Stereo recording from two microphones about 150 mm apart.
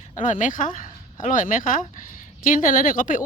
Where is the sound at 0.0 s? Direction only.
55° left (ahead or behind).